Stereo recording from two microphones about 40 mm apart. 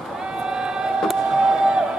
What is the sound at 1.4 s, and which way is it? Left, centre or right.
Crowd, right.